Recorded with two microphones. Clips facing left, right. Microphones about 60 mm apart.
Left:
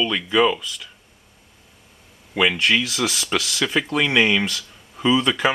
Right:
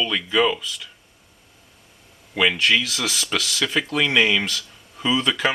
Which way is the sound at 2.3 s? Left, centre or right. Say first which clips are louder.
Even; centre.